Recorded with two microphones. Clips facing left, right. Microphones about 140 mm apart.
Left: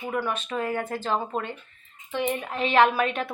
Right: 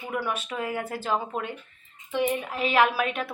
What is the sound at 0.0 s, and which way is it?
A woman's voice, 5° right (ahead or behind).